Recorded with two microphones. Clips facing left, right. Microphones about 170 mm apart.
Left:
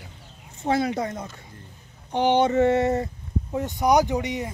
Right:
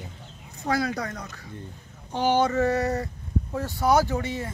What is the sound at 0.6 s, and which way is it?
Speech, 25° left (ahead or behind).